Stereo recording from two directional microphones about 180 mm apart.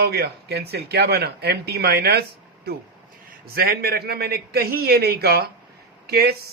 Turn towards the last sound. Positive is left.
turn(degrees=-60)  # may be behind; listen again after turning